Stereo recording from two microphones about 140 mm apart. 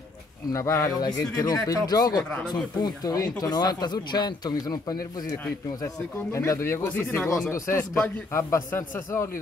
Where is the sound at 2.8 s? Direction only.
25° left (ahead or behind).